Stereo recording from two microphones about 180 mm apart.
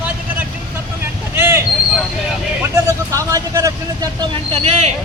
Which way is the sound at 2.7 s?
15° right (ahead or behind).